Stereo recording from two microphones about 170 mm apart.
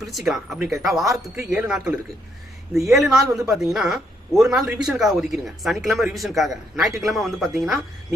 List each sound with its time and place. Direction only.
0.1 s speech: centre (ahead or behind)